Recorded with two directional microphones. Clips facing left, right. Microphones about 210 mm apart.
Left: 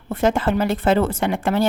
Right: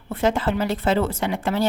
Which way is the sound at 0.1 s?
45° left (ahead or behind).